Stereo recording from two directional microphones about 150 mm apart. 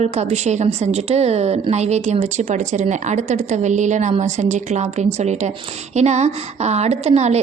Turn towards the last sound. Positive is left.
turn(degrees=-45)  # may be behind; listen again after turning